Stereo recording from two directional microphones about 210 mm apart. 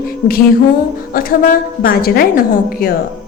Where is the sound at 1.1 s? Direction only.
45° left (ahead or behind).